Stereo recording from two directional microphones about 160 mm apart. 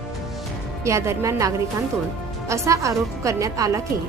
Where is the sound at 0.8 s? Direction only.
15° right (ahead or behind).